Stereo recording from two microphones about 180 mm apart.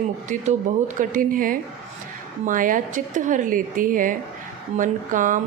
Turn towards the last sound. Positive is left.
turn(degrees=-45)  # may be behind; listen again after turning